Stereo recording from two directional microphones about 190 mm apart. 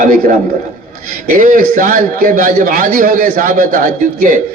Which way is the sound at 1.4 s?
45° right (ahead or behind).